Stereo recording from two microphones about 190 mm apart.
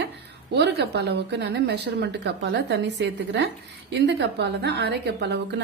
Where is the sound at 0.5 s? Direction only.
60° right (ahead or behind).